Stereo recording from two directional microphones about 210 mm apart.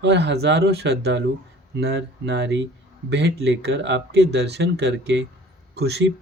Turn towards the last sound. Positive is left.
turn(degrees=-55)  # may be behind; listen again after turning